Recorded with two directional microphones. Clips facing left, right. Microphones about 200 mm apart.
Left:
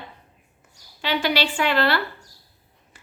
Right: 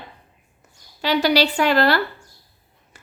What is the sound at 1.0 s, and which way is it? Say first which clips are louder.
A woman's voice: right 5 dB; 40° right (ahead or behind).